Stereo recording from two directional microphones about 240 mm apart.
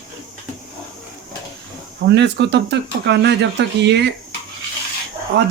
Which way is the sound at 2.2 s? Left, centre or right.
Right.